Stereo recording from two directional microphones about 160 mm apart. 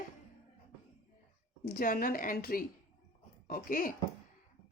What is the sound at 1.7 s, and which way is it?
A woman's voice, 60° left (ahead or behind).